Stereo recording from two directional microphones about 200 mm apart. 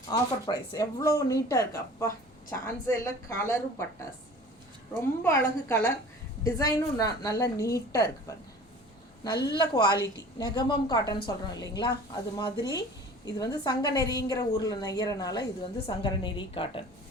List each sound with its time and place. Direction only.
0.1 s speech: 20° left (ahead or behind)
5.2 s speech: 15° left (ahead or behind)
9.6 s a woman's voice: 20° left (ahead or behind)